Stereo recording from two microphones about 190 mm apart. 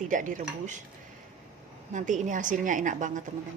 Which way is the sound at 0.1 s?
45° right (ahead or behind).